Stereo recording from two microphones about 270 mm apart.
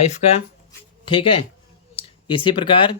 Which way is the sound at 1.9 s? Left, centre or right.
Centre.